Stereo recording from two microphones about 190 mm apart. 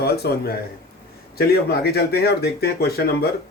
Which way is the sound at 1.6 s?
55° left (ahead or behind).